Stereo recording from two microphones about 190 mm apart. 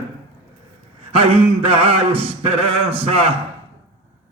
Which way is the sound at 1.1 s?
30° right (ahead or behind).